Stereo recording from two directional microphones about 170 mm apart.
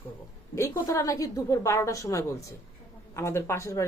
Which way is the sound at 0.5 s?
15° left (ahead or behind).